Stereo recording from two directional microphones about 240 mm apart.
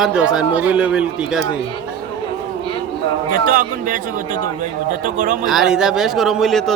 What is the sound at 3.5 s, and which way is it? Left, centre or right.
Speech, right.